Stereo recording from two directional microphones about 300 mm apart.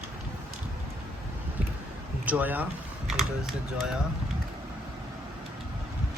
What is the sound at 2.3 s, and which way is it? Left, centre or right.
Speech, centre.